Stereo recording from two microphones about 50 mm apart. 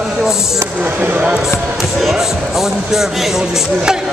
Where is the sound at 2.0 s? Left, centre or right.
Centre.